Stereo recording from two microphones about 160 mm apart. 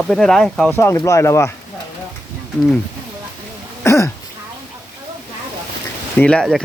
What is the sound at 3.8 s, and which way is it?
Speech, 20° left (ahead or behind).